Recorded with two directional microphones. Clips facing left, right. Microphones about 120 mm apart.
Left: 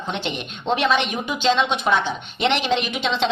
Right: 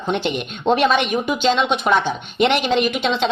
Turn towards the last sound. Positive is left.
turn(degrees=-50)  # may be behind; listen again after turning